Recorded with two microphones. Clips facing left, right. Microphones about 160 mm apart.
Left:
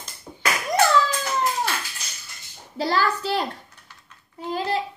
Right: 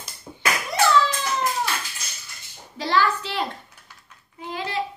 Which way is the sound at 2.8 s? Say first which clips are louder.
Even; 40° left (ahead or behind).